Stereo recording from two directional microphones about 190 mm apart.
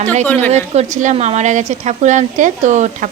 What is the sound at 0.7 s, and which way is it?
Speech, 40° right (ahead or behind).